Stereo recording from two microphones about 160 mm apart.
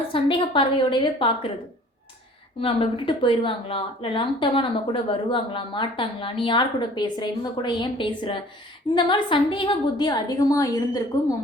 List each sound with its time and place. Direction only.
0.1 s a woman's voice: 30° left (ahead or behind)
2.6 s a woman's voice: 35° left (ahead or behind)